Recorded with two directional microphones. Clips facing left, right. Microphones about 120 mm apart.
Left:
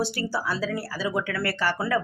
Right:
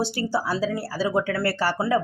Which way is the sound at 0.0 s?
25° right (ahead or behind).